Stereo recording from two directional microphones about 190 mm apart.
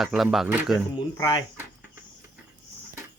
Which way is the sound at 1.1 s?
15° left (ahead or behind).